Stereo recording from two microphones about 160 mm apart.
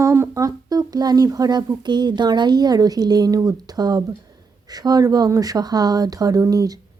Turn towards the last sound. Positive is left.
turn(degrees=-20)  # may be behind; listen again after turning